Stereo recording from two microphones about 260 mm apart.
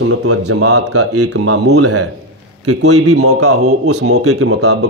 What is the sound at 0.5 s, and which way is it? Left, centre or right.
A man's voice, right.